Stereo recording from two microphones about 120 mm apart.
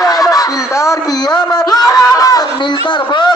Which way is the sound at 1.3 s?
35° left (ahead or behind).